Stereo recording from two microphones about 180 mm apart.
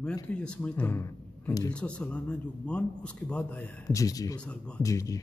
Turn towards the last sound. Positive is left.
turn(degrees=15)  # may be behind; listen again after turning